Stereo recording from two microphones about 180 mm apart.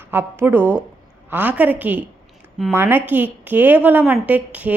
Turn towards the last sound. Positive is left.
turn(degrees=-10)  # may be behind; listen again after turning